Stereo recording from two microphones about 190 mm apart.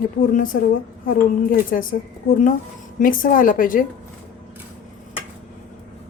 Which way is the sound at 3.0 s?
45° left (ahead or behind).